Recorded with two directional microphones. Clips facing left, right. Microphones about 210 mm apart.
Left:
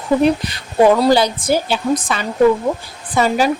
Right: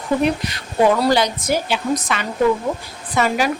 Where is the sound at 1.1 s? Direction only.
30° left (ahead or behind).